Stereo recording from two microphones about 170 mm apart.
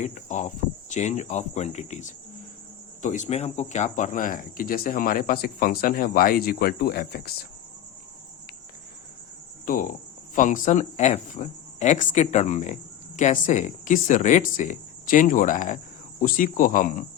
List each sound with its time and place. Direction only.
0.0 s speech: 45° left (ahead or behind)
9.6 s speech: 55° left (ahead or behind)